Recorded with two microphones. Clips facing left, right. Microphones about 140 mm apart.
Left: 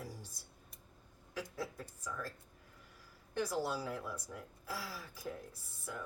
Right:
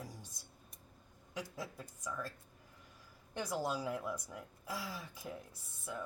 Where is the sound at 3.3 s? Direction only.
20° right (ahead or behind).